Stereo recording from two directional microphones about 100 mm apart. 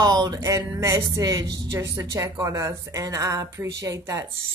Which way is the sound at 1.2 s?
40° right (ahead or behind).